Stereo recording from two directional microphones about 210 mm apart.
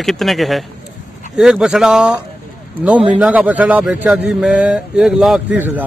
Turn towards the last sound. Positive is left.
turn(degrees=-10)  # may be behind; listen again after turning